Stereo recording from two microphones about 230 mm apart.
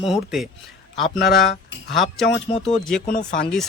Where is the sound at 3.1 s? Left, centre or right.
Left.